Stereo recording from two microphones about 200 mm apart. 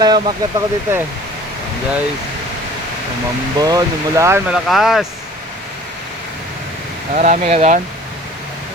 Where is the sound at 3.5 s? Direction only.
20° right (ahead or behind).